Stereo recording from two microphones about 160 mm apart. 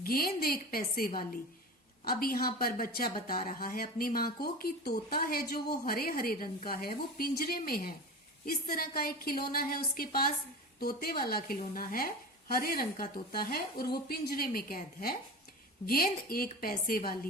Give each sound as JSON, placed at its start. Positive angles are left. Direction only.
{"t": 0.0, "sound": "speech", "side_deg": 65}